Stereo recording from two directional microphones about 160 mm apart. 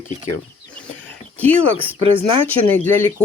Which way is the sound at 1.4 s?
10° left (ahead or behind).